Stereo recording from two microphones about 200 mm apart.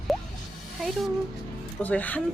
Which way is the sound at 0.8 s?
Centre (ahead or behind).